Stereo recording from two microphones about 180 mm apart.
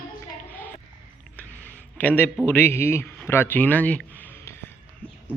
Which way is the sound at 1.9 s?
10° left (ahead or behind).